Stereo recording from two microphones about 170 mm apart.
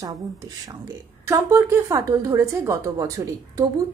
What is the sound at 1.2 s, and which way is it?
A woman's voice, 15° right (ahead or behind).